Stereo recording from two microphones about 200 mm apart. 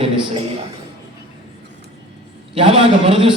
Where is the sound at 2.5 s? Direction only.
25° right (ahead or behind).